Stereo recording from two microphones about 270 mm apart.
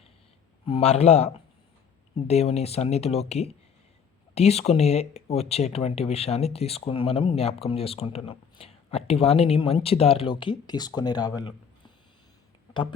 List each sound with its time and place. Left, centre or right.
0.6 s speech: left